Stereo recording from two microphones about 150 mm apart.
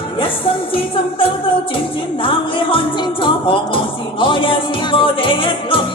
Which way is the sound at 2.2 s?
35° left (ahead or behind).